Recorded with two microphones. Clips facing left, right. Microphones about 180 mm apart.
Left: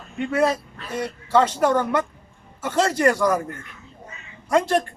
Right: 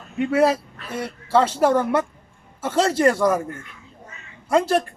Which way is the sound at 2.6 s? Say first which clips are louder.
Right 2 dB; 30° right (ahead or behind).